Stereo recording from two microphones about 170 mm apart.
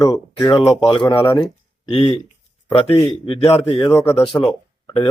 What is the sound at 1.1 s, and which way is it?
Speech, 15° left (ahead or behind).